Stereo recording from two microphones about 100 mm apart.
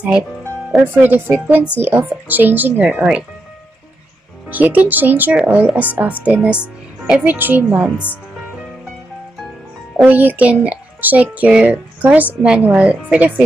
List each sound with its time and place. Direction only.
0.4 s music: 20° right (ahead or behind)
0.9 s speech: 20° right (ahead or behind)
4.5 s speech: 15° right (ahead or behind)
10.0 s speech: 15° right (ahead or behind)